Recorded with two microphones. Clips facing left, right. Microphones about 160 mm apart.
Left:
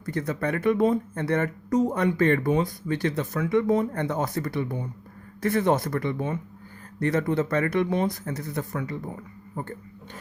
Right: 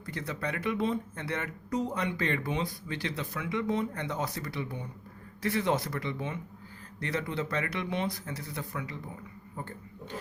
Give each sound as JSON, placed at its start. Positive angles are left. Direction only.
{"t": 0.0, "sound": "speech", "side_deg": 45}